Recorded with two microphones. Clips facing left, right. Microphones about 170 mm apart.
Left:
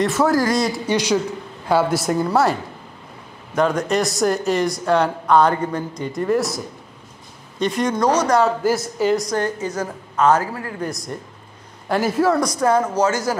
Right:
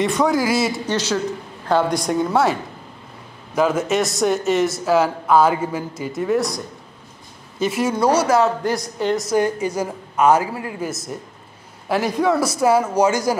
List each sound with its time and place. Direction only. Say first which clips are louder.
0.0 s speech: left 1 dB; centre (ahead or behind)
0.8 s speech: left 2 dB; 15° left (ahead or behind)
3.5 s speech: even; 5° right (ahead or behind)
9.3 s a woman's voice: right 3 dB; 10° right (ahead or behind)
10.9 s a woman's voice: even; 5° right (ahead or behind)